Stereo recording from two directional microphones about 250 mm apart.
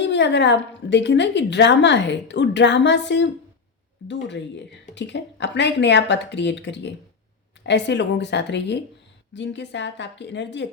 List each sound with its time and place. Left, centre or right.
0.0 s a woman's voice: left